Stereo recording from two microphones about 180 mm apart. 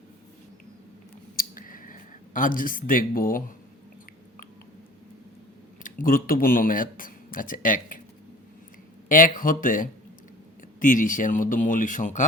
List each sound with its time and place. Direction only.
1.4 s a sound: 50° left (ahead or behind)
5.8 s speech: 50° left (ahead or behind)
9.0 s speech: 50° left (ahead or behind)